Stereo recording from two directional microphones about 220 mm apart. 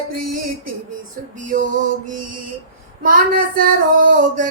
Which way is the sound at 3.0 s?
40° right (ahead or behind).